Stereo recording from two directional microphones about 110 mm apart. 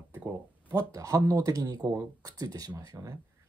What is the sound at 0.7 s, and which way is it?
A man's voice, 30° right (ahead or behind).